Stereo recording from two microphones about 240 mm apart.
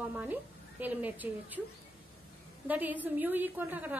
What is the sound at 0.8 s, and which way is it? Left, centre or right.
Speech, centre.